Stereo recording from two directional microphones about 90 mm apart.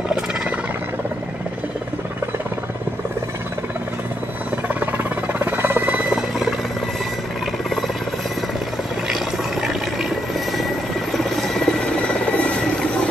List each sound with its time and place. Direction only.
4.7 s music: 20° right (ahead or behind)
9.1 s water: 5° right (ahead or behind)
10.6 s helicopter: centre (ahead or behind)